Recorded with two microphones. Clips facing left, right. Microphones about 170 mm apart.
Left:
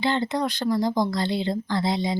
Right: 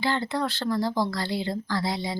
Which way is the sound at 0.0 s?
20° left (ahead or behind).